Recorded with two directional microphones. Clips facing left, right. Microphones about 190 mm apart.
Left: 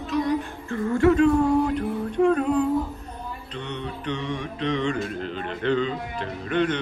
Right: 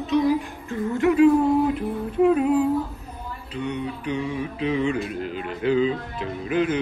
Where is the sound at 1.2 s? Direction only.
5° right (ahead or behind).